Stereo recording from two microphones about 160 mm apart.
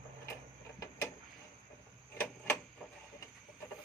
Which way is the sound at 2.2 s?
10° left (ahead or behind).